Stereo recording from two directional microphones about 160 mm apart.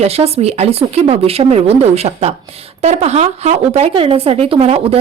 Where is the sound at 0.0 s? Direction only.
40° right (ahead or behind).